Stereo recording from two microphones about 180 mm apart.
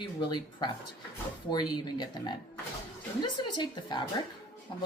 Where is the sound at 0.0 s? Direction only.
25° left (ahead or behind).